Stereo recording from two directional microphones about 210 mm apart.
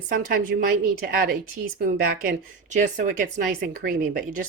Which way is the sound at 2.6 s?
35° right (ahead or behind).